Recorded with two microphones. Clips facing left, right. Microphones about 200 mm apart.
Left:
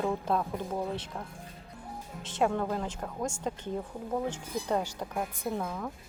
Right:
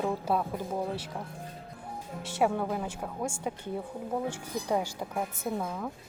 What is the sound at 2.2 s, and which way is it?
Speech, 10° right (ahead or behind).